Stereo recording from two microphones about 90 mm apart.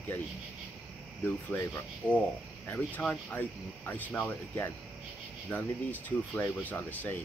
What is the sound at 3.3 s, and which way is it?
Speech, 20° left (ahead or behind).